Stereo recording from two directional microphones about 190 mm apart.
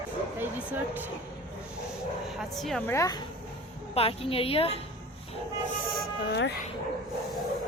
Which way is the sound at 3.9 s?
30° left (ahead or behind).